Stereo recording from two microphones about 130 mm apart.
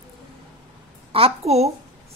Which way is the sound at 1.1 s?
50° right (ahead or behind).